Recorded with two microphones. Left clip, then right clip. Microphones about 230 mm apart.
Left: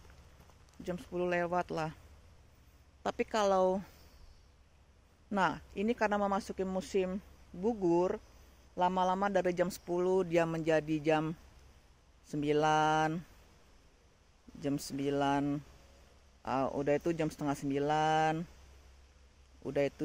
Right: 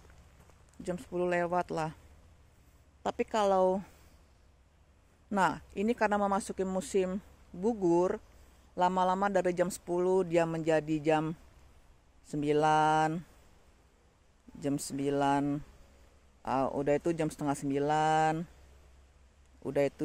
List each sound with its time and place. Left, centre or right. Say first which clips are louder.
0.8 s speech: right 3 dB; right
3.0 s a man's voice: right 2 dB; centre
5.3 s a man's voice: right 3 dB; centre
14.6 s a man's voice: right 2 dB; centre
19.6 s speech: right 3 dB; centre